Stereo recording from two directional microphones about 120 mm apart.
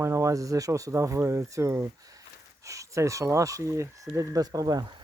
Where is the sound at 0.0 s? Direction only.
25° right (ahead or behind).